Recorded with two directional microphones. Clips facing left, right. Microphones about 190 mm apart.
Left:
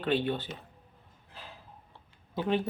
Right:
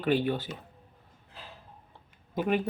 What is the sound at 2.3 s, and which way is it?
Speech, 10° right (ahead or behind).